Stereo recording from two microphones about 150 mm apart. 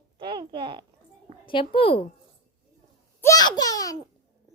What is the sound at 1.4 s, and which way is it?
Speech, 35° left (ahead or behind).